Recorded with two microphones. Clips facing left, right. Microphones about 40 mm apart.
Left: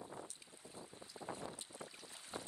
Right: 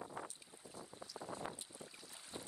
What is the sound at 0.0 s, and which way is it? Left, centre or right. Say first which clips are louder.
Boat: right 3 dB; right.